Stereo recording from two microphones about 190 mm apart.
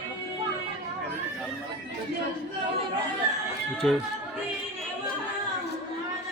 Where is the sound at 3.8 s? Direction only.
Centre (ahead or behind).